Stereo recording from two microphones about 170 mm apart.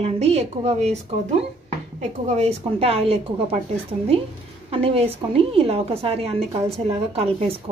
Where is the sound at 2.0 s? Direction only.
40° right (ahead or behind).